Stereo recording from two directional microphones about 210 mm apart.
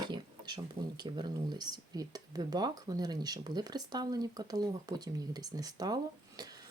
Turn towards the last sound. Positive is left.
turn(degrees=-20)  # may be behind; listen again after turning